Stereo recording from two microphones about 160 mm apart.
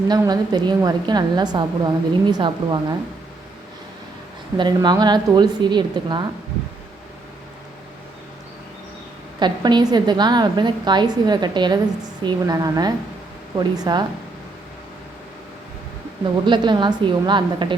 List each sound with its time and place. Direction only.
0.2 s a woman's voice: 25° right (ahead or behind)
4.5 s a woman's voice: 25° right (ahead or behind)
9.4 s a woman's voice: 25° right (ahead or behind)
16.5 s a woman's voice: 30° right (ahead or behind)